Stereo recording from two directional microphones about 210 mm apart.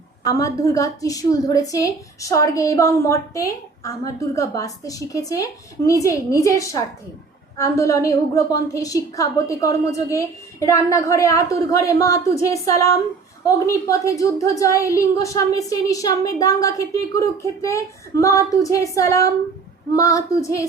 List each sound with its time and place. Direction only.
0.3 s a woman's voice: 15° left (ahead or behind)